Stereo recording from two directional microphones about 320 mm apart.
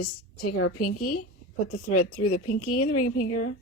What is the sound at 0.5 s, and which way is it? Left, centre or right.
Speech, left.